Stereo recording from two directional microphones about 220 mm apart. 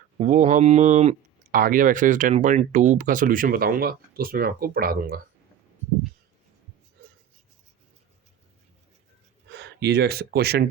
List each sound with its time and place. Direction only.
0.2 s speech: 35° right (ahead or behind)
9.5 s speech: 50° right (ahead or behind)